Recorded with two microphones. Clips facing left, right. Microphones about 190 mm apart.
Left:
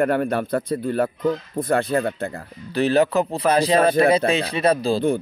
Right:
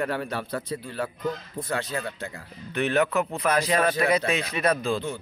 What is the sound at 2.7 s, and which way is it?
Speech, 35° left (ahead or behind).